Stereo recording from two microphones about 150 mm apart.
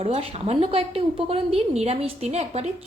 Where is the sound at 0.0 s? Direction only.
40° right (ahead or behind).